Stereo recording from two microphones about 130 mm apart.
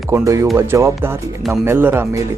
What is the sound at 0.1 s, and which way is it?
Speech, 25° right (ahead or behind).